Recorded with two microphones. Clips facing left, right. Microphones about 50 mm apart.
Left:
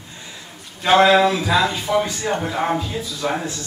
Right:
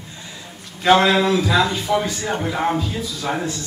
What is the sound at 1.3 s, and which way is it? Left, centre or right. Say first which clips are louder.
A man's voice: right 1 dB; centre.